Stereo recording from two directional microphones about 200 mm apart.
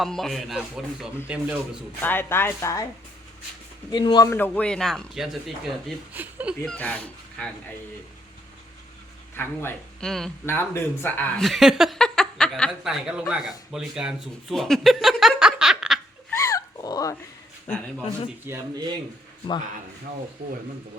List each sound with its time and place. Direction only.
0.0 s speech: centre (ahead or behind)
2.0 s speech: 10° left (ahead or behind)
3.9 s speech: 20° left (ahead or behind); by 6.6 s 5° right (ahead or behind)
6.7 s speech: 5° left (ahead or behind)
9.3 s speech: 10° left (ahead or behind)
16.3 s a sound: 15° left (ahead or behind)
18.4 s speech: 15° right (ahead or behind)